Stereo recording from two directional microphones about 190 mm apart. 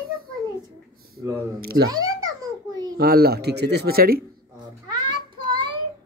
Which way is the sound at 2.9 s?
55° right (ahead or behind).